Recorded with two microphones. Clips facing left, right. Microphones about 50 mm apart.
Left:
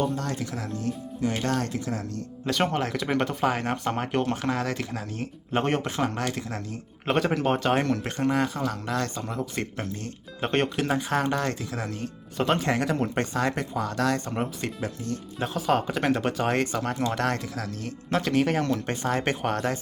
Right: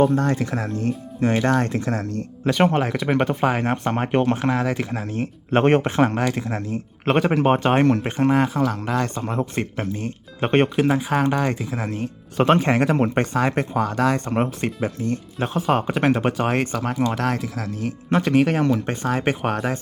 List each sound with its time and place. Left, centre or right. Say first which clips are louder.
0.2 s speech: right 9 dB; right
2.8 s speech: right 5 dB; centre
4.9 s speech: right 7 dB; right
6.1 s speech: right 7 dB; right
9.0 s speech: right 6 dB; right
9.6 s speech: right 6 dB; right
12.4 s speech: right 7 dB; right
12.6 s speech: right 6 dB; right
13.8 s speech: right 5 dB; centre
14.3 s speech: right 7 dB; right
16.5 s speech: right 3 dB; centre